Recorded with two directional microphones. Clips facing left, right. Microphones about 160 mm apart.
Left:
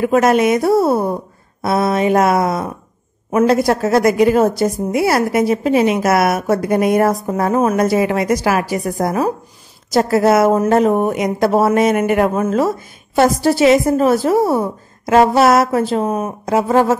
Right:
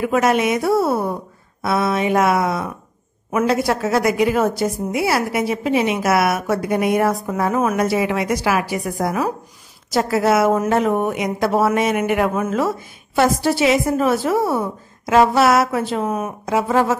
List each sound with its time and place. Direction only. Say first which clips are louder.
0.0 s a woman's voice: left 4 dB; 40° left (ahead or behind)